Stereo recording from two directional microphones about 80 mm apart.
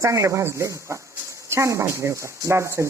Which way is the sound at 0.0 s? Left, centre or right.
Right.